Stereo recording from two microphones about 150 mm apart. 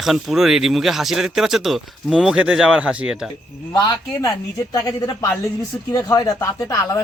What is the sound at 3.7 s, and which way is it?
A man's voice, 25° left (ahead or behind).